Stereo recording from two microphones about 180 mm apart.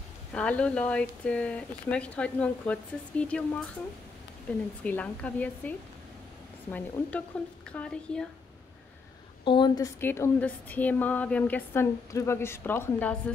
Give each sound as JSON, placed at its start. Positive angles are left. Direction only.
{"t": 0.3, "sound": "a woman's voice", "side_deg": 5}
{"t": 4.5, "sound": "a woman's voice", "side_deg": 5}
{"t": 9.4, "sound": "a woman's voice", "side_deg": 25}